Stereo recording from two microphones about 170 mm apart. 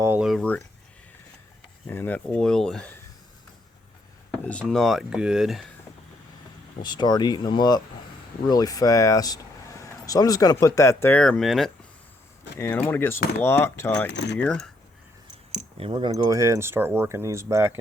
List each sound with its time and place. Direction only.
0.0 s a sound: 15° right (ahead or behind)
0.3 s speech: 5° left (ahead or behind)
1.9 s speech: 10° left (ahead or behind)
4.6 s speech: centre (ahead or behind)
6.8 s speech: 25° left (ahead or behind); by 11.7 s centre (ahead or behind)
12.5 s speech: 10° left (ahead or behind)
14.1 s speech: 90° left
14.3 s speech: 5° left (ahead or behind)
15.9 s speech: 25° right (ahead or behind)